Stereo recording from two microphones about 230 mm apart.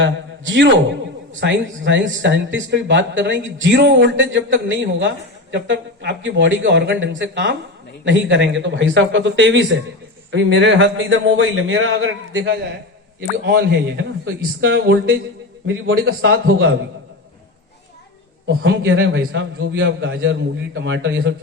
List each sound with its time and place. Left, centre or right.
0.0 s a man's voice: right
18.6 s speech: right